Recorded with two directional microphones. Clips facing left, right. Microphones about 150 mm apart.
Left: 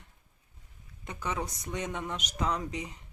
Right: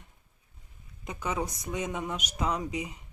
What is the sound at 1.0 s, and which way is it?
Speech, 20° right (ahead or behind).